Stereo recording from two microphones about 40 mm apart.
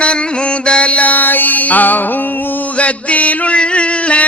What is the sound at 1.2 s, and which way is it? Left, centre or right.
Music, left.